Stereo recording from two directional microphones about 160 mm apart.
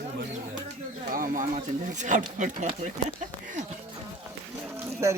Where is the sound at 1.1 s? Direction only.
60° right (ahead or behind).